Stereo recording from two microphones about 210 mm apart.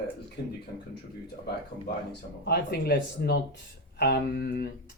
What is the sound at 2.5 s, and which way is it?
Speech, 50° left (ahead or behind).